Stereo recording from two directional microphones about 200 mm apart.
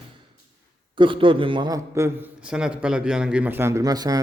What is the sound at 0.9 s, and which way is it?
A man's voice, 25° right (ahead or behind).